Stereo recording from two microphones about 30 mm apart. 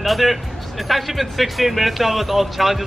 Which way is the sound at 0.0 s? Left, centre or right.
Centre.